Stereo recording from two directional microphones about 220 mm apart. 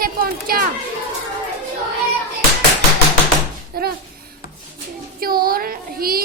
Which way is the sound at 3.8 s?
45° right (ahead or behind).